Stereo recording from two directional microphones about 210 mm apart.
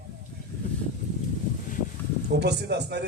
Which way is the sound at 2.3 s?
50° right (ahead or behind).